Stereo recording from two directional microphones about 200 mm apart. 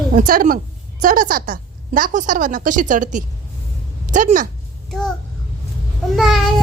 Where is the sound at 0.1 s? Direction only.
45° right (ahead or behind).